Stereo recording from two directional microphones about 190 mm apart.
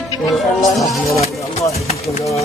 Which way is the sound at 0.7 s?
Centre (ahead or behind).